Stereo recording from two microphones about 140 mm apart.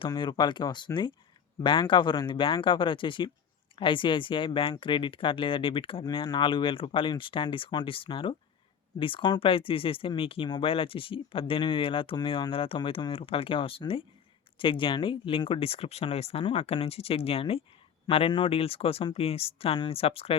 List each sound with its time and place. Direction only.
0.1 s speech: 35° left (ahead or behind)